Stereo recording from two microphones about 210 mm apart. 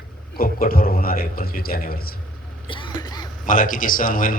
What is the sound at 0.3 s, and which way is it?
A man's voice, 45° left (ahead or behind).